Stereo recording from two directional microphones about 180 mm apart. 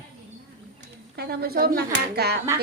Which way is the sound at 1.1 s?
60° right (ahead or behind).